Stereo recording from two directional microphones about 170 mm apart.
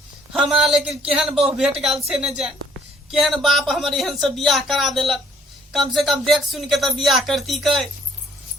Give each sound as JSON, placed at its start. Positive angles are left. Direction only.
{"t": 0.3, "sound": "speech", "side_deg": 0}